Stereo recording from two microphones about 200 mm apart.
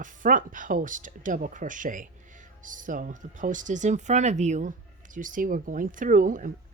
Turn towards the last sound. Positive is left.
turn(degrees=-40)  # may be behind; listen again after turning